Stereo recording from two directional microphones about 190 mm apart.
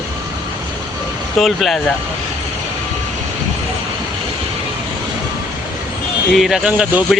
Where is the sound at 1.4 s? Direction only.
Centre (ahead or behind).